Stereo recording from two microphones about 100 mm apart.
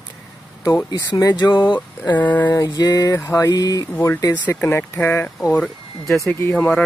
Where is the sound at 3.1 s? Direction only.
25° left (ahead or behind).